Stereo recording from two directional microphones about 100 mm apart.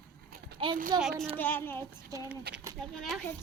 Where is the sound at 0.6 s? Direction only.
55° right (ahead or behind).